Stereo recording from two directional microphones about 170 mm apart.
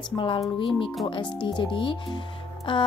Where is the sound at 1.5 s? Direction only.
30° left (ahead or behind).